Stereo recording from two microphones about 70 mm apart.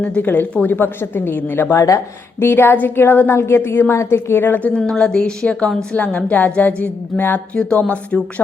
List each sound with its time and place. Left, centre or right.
0.0 s a woman's voice: left
1.7 s speech: left
2.4 s a woman's voice: left
4.8 s a woman's voice: centre